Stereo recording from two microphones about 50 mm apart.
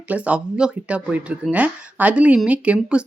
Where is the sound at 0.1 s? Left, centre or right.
Right.